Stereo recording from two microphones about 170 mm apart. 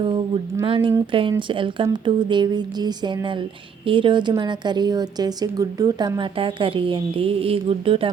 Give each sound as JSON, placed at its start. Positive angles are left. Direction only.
{"t": 0.6, "sound": "a woman's voice", "side_deg": -30}